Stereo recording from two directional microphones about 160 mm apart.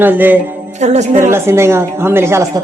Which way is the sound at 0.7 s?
45° right (ahead or behind).